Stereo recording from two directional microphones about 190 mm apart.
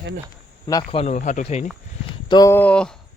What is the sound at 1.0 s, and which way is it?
Speech, 40° left (ahead or behind).